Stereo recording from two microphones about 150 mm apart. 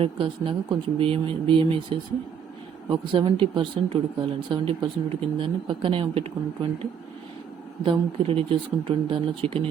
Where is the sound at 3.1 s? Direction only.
35° right (ahead or behind).